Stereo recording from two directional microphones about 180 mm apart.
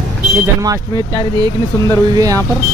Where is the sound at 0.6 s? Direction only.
20° right (ahead or behind).